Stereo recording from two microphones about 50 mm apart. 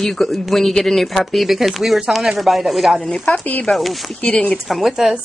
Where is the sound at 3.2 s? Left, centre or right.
Left.